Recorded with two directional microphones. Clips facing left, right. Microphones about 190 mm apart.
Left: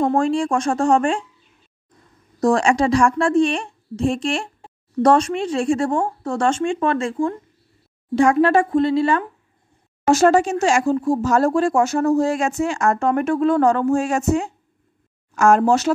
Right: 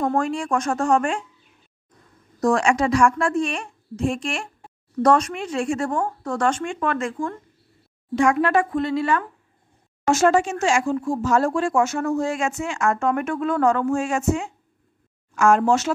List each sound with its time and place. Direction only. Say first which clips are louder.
0.0 s speech: left 5 dB; 30° left (ahead or behind)
2.4 s a woman's voice: left 3 dB; 35° left (ahead or behind)